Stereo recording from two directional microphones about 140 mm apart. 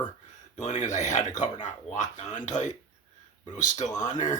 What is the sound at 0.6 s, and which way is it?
Speech, 60° left (ahead or behind).